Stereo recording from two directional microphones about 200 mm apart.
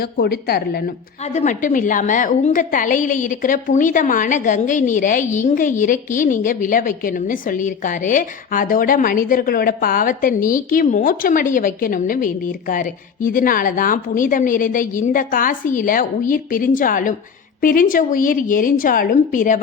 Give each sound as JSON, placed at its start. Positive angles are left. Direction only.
{"t": 0.0, "sound": "a woman's voice", "side_deg": 50}
{"t": 1.2, "sound": "a woman's voice", "side_deg": 35}